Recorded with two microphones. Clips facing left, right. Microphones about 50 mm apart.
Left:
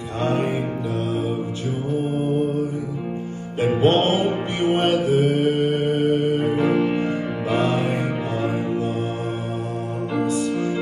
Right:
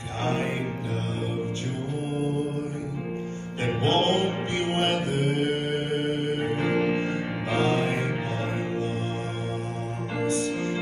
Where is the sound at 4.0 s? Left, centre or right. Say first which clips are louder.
Left 4 dB; right.